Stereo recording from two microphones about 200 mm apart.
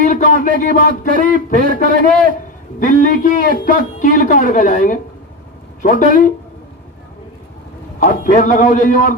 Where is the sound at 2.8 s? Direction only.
40° left (ahead or behind).